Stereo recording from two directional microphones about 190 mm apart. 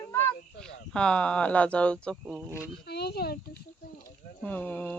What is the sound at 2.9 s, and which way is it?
Speech, 60° left (ahead or behind).